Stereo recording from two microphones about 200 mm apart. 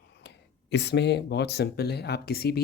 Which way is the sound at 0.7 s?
55° left (ahead or behind).